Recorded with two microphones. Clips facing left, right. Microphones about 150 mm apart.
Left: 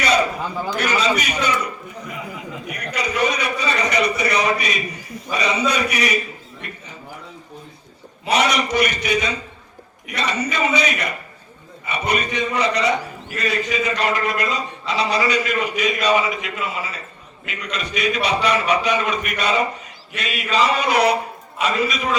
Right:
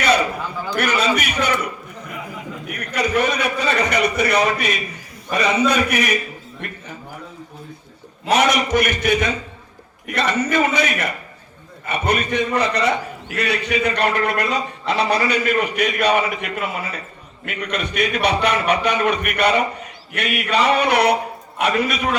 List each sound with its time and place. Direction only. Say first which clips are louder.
0.8 s a man's voice: right 2 dB; 55° right (ahead or behind)
2.6 s a man's voice: right 4 dB; 55° right (ahead or behind)
8.3 s a man's voice: right 2 dB; 50° right (ahead or behind)